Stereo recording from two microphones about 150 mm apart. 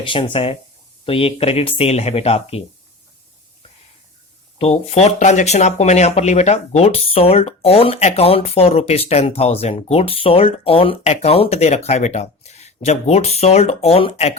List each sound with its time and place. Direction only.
0.0 s speech: 35° left (ahead or behind)
4.5 s speech: 40° left (ahead or behind)